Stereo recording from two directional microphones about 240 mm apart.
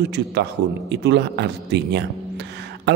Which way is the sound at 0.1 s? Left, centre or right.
Right.